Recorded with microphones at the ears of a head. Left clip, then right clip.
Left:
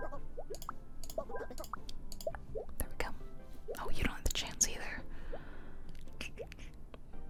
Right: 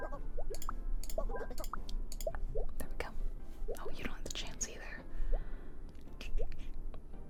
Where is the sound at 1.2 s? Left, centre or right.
Centre.